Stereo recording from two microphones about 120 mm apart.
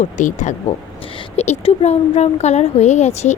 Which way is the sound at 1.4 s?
65° left (ahead or behind).